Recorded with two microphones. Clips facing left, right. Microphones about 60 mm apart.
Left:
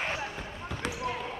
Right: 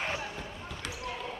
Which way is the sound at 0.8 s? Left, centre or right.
Left.